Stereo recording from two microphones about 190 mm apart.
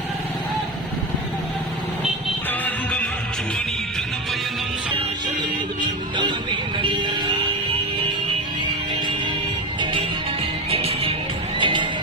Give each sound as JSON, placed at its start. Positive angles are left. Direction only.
{"t": 2.5, "sound": "music", "side_deg": 10}
{"t": 6.8, "sound": "music", "side_deg": -25}
{"t": 9.8, "sound": "music", "side_deg": -25}